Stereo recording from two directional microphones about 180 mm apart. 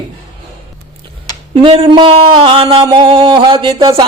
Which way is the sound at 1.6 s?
30° right (ahead or behind).